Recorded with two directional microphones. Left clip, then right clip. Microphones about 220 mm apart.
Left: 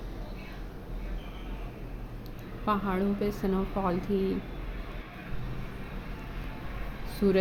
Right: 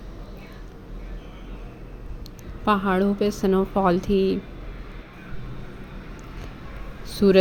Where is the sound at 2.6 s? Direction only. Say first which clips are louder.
Right 8 dB; 35° right (ahead or behind).